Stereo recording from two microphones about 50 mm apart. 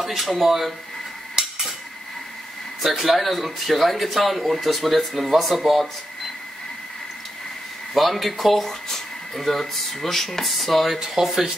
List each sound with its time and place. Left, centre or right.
0.0 s speech: centre
1.4 s cutlery: centre
2.8 s speech: centre
7.9 s speech: centre